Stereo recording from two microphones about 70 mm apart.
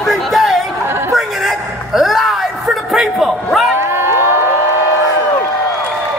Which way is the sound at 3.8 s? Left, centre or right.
Right.